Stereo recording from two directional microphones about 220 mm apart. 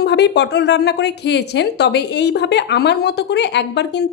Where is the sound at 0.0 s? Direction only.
50° left (ahead or behind).